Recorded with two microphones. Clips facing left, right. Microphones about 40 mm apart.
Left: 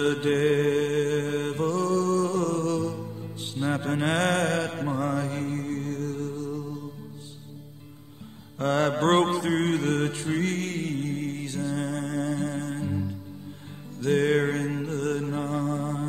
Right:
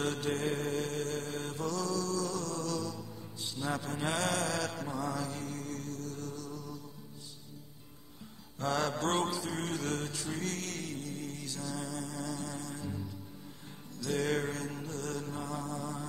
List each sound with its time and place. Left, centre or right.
0.0 s mantra: left
8.5 s mantra: left
13.9 s music: left